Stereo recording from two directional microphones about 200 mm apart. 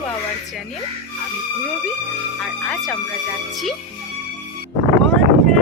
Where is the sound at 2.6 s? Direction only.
Centre (ahead or behind).